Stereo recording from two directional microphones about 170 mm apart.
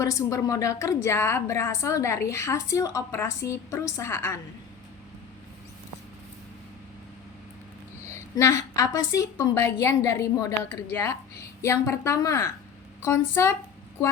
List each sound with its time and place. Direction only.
0.0 s a woman's voice: 20° left (ahead or behind)
8.1 s a woman's voice: 20° left (ahead or behind)